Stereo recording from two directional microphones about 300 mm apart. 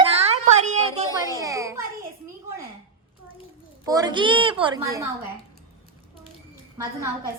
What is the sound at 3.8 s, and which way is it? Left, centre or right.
A woman's voice, centre.